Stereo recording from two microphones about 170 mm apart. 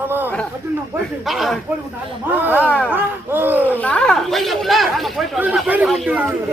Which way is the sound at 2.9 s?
10° right (ahead or behind).